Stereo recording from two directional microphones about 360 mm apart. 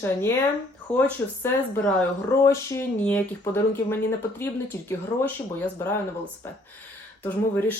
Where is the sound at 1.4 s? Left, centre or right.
Centre.